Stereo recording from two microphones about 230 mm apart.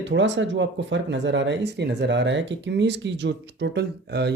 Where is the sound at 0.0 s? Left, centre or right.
Right.